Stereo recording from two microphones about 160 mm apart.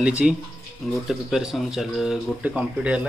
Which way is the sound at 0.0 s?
5° right (ahead or behind).